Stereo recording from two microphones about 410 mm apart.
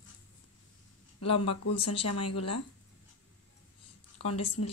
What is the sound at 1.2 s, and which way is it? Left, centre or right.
Speech, left.